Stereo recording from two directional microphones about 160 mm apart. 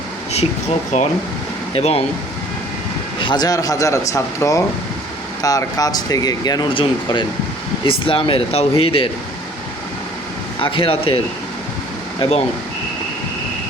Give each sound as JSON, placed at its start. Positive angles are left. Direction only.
{"t": 0.3, "sound": "speech", "side_deg": 40}
{"t": 3.2, "sound": "speech", "side_deg": 30}
{"t": 10.6, "sound": "speech", "side_deg": 35}